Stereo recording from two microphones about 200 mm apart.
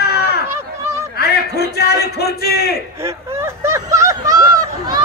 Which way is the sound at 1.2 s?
55° left (ahead or behind).